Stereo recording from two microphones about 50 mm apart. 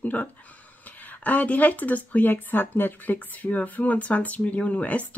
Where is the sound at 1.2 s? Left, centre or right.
Left.